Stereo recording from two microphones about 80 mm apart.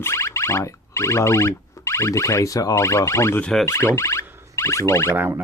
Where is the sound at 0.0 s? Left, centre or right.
Left.